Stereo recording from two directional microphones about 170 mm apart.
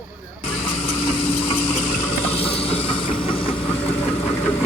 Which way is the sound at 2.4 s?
35° left (ahead or behind).